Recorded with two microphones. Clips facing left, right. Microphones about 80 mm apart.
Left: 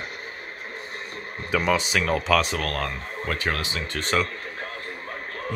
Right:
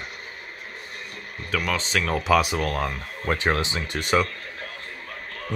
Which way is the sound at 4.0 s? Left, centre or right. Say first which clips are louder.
Right 2 dB; centre.